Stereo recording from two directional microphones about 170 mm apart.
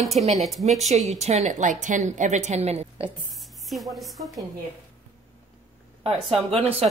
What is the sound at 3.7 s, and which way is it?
Speech, centre (ahead or behind).